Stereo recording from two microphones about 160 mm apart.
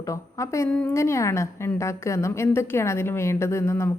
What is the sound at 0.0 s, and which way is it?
Speech, 20° left (ahead or behind).